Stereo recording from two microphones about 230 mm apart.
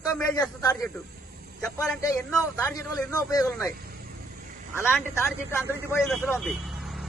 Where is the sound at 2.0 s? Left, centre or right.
Centre.